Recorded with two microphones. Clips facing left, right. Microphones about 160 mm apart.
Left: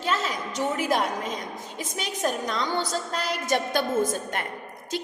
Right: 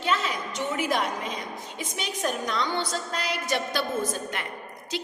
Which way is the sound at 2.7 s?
45° left (ahead or behind).